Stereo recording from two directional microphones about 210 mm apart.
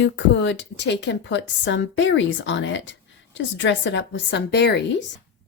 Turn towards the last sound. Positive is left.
turn(degrees=55)  # may be behind; listen again after turning